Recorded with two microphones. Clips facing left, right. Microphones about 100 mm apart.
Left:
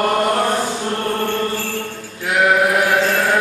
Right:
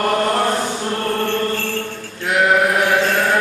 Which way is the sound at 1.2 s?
10° left (ahead or behind).